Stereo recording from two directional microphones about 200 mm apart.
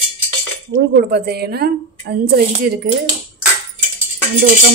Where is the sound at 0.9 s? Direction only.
55° right (ahead or behind).